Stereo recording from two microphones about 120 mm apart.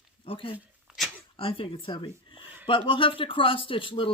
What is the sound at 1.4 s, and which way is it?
Speech, 50° left (ahead or behind).